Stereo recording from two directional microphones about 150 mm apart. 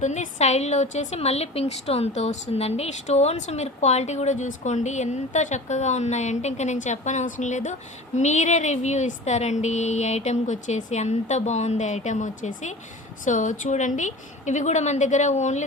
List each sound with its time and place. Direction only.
0.0 s a woman's voice: 50° left (ahead or behind)